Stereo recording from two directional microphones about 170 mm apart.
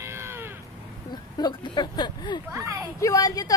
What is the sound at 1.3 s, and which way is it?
A woman's voice, 25° left (ahead or behind).